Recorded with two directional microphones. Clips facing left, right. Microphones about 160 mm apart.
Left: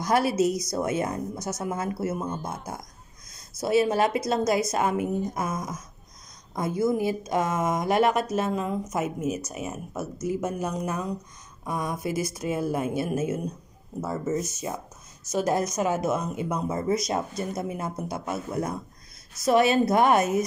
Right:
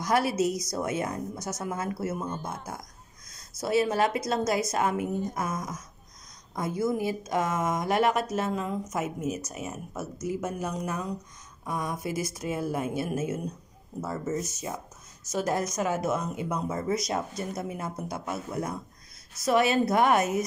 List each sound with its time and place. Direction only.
0.0 s speech: 30° left (ahead or behind)
3.6 s speech: 20° left (ahead or behind)
14.0 s speech: 15° left (ahead or behind); by 20.2 s 30° left (ahead or behind)